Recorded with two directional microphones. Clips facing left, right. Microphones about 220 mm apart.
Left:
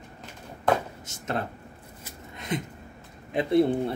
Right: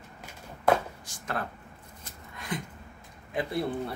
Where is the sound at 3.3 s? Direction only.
25° left (ahead or behind).